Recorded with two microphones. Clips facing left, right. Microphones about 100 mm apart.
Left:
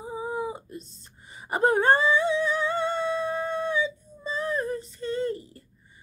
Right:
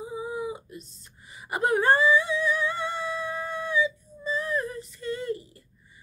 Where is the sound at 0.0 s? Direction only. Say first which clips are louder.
Left 1 dB; 35° left (ahead or behind).